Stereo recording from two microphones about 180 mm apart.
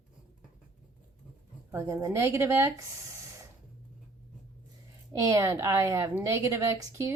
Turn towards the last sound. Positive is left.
turn(degrees=-15)  # may be behind; listen again after turning